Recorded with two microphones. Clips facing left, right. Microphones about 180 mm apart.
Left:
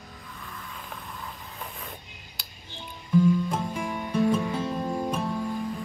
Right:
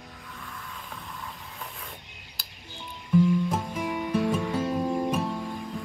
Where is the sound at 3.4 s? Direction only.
5° right (ahead or behind).